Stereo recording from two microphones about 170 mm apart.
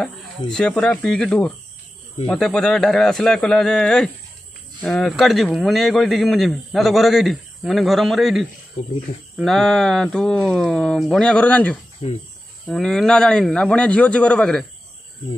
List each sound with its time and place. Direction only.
0.0 s speech: 5° left (ahead or behind)
8.8 s speech: 45° left (ahead or behind)
9.4 s speech: centre (ahead or behind)
12.0 s speech: 35° left (ahead or behind)
12.6 s speech: 5° left (ahead or behind)